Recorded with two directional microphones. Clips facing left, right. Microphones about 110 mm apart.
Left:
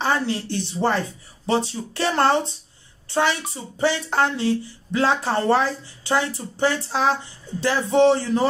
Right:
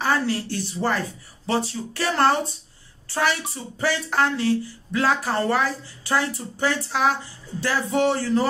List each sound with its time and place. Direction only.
0.0 s speech: 25° left (ahead or behind)